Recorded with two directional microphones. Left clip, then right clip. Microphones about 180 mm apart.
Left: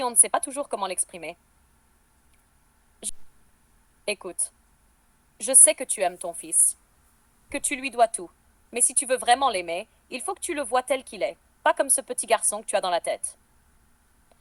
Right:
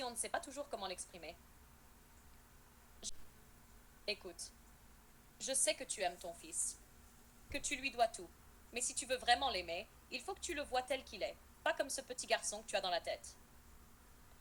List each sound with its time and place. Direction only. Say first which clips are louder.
0.0 s a woman's voice: left 17 dB; 45° left (ahead or behind)
4.0 s a woman's voice: left 13 dB; 45° left (ahead or behind)
5.4 s a woman's voice: left 16 dB; 45° left (ahead or behind)